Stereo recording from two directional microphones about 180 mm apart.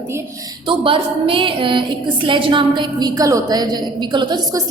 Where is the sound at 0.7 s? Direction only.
30° right (ahead or behind).